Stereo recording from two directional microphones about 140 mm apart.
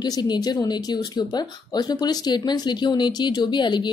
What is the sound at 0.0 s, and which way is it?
Speech, 30° left (ahead or behind).